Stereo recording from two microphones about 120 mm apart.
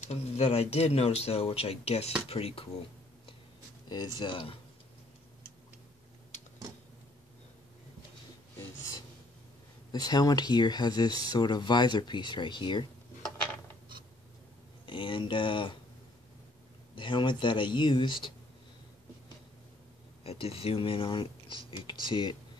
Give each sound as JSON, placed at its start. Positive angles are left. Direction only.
{"t": 0.0, "sound": "speech", "side_deg": 65}
{"t": 3.9, "sound": "speech", "side_deg": 35}
{"t": 9.9, "sound": "speech", "side_deg": 35}
{"t": 14.9, "sound": "speech", "side_deg": 45}
{"t": 16.9, "sound": "speech", "side_deg": 40}
{"t": 20.2, "sound": "speech", "side_deg": 50}